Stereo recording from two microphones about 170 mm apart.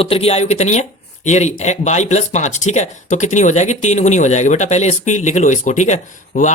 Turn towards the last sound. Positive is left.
turn(degrees=45)  # may be behind; listen again after turning